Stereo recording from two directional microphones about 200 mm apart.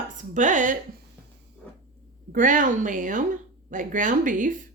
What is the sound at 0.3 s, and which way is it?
Speech, 40° right (ahead or behind).